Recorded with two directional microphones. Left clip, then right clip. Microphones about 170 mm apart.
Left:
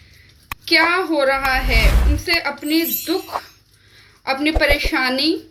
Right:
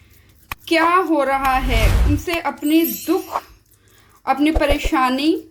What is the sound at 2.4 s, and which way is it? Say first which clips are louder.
Speech: right 5 dB; 65° right (ahead or behind).